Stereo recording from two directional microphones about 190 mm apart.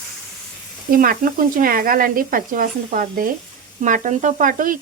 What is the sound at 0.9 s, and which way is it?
Speech, 50° right (ahead or behind).